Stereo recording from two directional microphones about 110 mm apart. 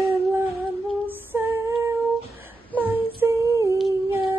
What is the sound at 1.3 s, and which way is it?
Female singing, 20° right (ahead or behind).